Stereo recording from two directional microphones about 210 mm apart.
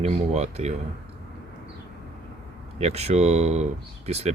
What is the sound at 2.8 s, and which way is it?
Speech, 30° right (ahead or behind).